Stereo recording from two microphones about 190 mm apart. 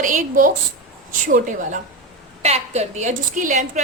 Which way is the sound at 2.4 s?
35° right (ahead or behind).